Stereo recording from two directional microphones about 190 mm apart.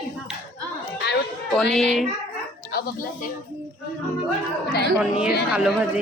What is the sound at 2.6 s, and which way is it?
Speech, 50° left (ahead or behind).